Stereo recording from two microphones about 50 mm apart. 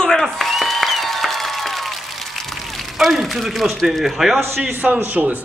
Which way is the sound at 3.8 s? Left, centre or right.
Centre.